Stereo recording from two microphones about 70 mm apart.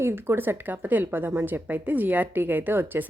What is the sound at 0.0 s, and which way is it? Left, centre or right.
A woman's voice, right.